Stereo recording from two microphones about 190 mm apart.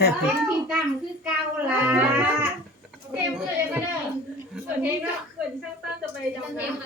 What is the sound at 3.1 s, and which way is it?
Chatter, 5° right (ahead or behind).